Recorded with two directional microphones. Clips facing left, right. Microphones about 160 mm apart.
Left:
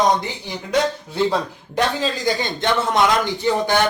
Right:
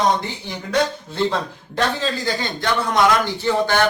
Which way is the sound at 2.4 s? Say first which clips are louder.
Left 2 dB; 20° left (ahead or behind).